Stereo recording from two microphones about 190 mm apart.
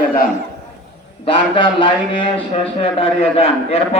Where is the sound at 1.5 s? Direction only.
25° left (ahead or behind).